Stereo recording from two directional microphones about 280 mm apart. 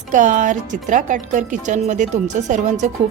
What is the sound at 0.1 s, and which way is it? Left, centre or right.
Speech, right.